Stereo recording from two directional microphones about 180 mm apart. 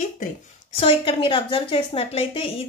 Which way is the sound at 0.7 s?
30° left (ahead or behind).